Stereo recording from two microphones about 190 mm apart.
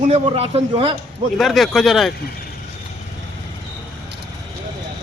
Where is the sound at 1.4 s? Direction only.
Centre (ahead or behind).